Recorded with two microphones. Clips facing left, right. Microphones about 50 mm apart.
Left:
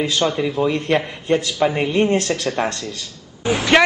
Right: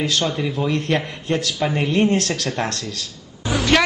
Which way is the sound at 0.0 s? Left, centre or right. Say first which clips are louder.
Left 2 dB; centre.